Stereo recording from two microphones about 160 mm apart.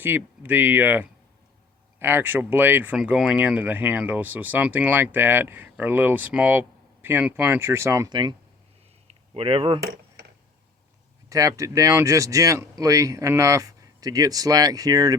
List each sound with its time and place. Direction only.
0.0 s speech: 10° right (ahead or behind); by 9.8 s 35° right (ahead or behind)
11.3 s speech: 20° right (ahead or behind)